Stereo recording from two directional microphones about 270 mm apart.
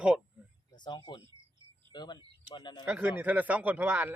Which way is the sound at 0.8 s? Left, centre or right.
Centre.